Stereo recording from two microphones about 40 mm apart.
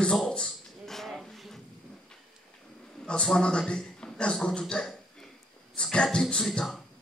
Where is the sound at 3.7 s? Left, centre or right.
Left.